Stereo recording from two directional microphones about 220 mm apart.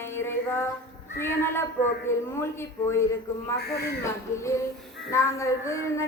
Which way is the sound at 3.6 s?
45° left (ahead or behind).